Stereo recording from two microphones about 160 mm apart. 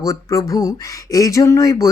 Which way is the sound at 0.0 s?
20° left (ahead or behind).